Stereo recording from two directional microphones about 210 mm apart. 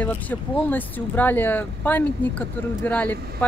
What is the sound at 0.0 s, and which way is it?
Speech, 10° left (ahead or behind).